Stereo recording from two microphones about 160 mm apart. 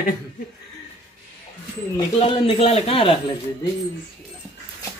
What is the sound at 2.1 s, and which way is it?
Speech, 35° left (ahead or behind).